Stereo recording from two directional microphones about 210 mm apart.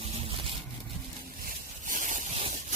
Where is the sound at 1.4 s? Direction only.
40° right (ahead or behind).